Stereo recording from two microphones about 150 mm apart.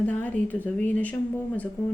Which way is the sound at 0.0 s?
10° left (ahead or behind).